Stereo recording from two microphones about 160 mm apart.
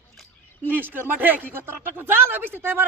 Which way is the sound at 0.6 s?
10° right (ahead or behind).